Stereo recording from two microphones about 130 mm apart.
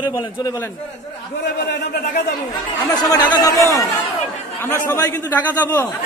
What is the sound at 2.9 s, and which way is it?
Speech, 30° left (ahead or behind).